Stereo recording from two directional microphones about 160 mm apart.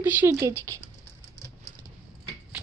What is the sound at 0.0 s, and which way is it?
Speech, 10° right (ahead or behind).